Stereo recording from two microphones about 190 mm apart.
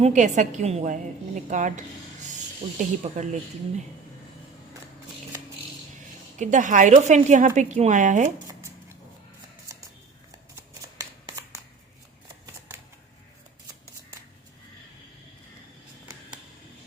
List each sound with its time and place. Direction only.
0.0 s speech: 40° right (ahead or behind)
6.4 s speech: 40° right (ahead or behind)